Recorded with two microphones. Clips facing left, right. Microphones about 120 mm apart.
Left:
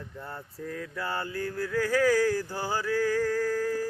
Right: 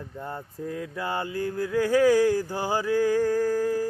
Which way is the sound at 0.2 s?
20° right (ahead or behind).